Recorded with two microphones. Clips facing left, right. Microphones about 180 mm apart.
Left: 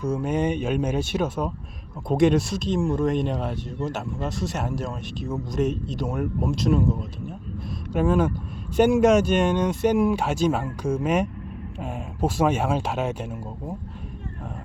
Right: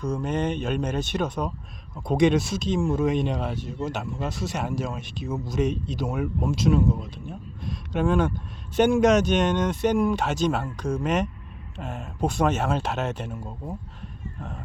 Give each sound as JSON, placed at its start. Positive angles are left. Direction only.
{"t": 0.0, "sound": "speech", "side_deg": 5}